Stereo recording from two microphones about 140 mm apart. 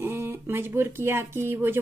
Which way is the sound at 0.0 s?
15° right (ahead or behind).